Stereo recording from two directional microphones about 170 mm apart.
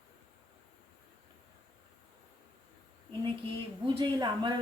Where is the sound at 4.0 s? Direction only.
30° right (ahead or behind).